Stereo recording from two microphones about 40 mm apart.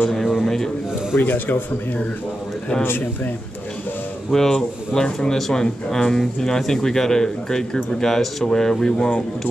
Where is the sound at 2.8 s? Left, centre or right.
Left.